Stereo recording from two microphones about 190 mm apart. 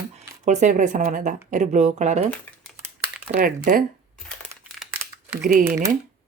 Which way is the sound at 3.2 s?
50° right (ahead or behind).